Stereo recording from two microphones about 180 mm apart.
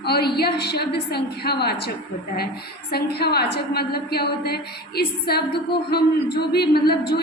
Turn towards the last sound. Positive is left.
turn(degrees=60)  # may be behind; listen again after turning